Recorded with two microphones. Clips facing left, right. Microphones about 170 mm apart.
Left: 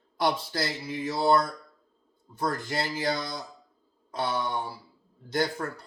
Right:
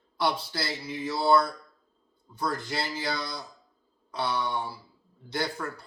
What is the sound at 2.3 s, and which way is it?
A man's voice, 50° left (ahead or behind).